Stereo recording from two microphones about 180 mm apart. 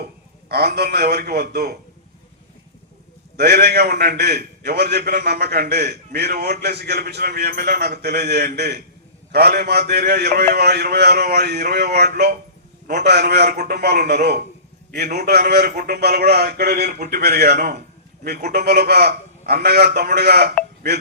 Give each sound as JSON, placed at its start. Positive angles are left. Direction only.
{"t": 0.0, "sound": "a man's voice", "side_deg": -60}
{"t": 3.3, "sound": "a man's voice", "side_deg": -65}